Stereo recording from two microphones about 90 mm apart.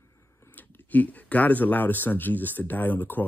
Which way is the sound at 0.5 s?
20° left (ahead or behind).